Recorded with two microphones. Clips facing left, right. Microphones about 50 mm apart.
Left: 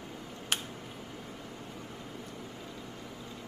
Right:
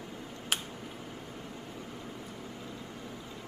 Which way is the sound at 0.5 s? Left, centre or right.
Centre.